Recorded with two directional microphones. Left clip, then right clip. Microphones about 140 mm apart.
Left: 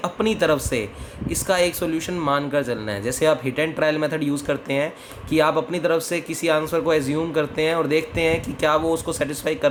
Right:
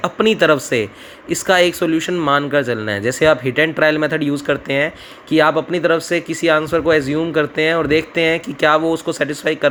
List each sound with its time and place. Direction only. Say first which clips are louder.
0.0 s speech: right 7 dB; 40° right (ahead or behind)